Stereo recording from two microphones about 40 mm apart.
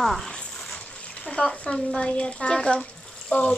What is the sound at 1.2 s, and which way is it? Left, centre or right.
Speech, left.